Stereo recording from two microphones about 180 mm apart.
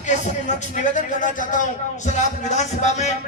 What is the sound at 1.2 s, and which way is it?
A man's voice, 45° left (ahead or behind).